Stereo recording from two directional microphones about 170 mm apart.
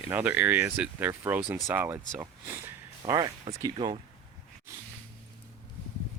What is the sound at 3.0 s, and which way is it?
Speech, 20° right (ahead or behind).